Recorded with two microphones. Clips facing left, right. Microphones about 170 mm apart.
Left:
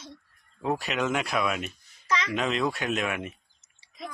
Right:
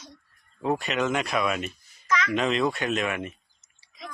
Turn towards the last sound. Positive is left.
turn(degrees=5)  # may be behind; listen again after turning